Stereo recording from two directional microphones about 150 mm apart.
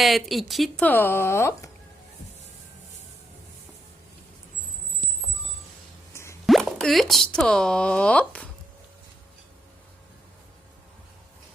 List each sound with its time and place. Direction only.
0.0 s speech: centre (ahead or behind)
0.9 s speech: 15° left (ahead or behind)
6.4 s speech: centre (ahead or behind)